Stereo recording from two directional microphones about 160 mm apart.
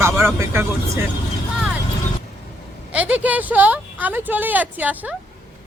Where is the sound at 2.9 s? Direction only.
10° right (ahead or behind).